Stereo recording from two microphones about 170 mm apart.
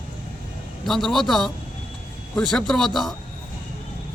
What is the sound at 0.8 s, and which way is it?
Speech, centre (ahead or behind).